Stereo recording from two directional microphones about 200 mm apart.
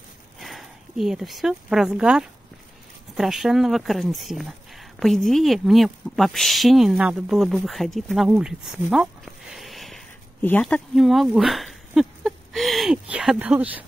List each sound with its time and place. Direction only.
0.4 s speech: centre (ahead or behind)